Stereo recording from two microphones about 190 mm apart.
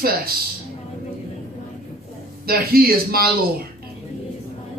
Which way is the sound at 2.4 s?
50° right (ahead or behind).